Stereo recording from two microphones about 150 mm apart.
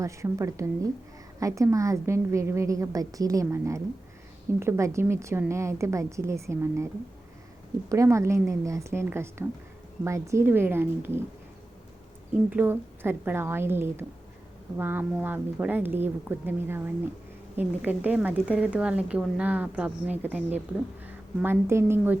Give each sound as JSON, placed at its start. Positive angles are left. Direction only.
{"t": 0.0, "sound": "a woman's voice", "side_deg": -20}
{"t": 7.9, "sound": "a woman's voice", "side_deg": -20}
{"t": 12.5, "sound": "a woman's voice", "side_deg": -10}